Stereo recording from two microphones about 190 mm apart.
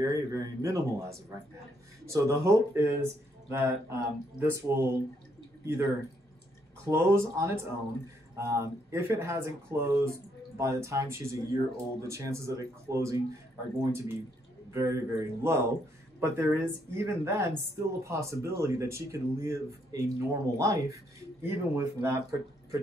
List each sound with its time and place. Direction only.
0.0 s speech: 15° right (ahead or behind)
6.9 s speech: 15° right (ahead or behind)